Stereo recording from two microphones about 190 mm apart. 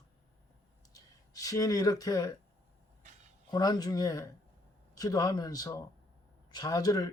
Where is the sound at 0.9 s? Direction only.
20° left (ahead or behind).